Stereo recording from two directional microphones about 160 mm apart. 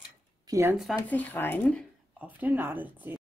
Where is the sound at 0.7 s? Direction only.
5° left (ahead or behind).